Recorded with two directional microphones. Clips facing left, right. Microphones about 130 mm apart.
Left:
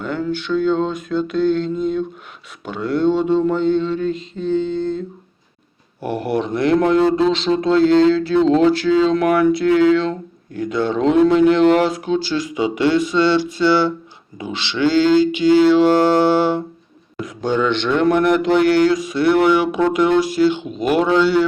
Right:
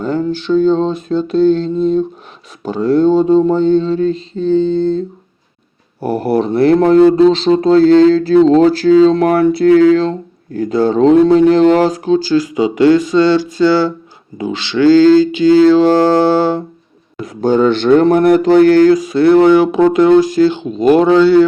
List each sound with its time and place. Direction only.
0.0 s speech: 35° right (ahead or behind)
14.8 s speech: 40° right (ahead or behind)
15.1 s mantra: 20° left (ahead or behind)
15.6 s speech: 40° right (ahead or behind)
17.2 s speech: 40° right (ahead or behind)